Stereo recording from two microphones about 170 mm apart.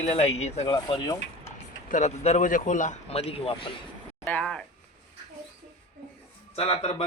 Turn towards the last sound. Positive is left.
turn(degrees=35)  # may be behind; listen again after turning